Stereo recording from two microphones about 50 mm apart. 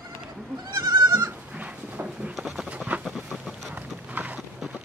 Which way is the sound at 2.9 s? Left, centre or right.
Right.